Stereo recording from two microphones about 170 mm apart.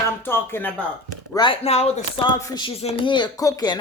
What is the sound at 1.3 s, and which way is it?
Speech, 30° left (ahead or behind).